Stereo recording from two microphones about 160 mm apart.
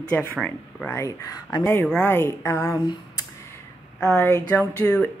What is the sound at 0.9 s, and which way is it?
Speech, 20° left (ahead or behind).